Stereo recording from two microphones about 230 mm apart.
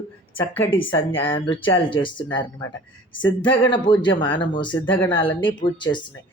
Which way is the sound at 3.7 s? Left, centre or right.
Left.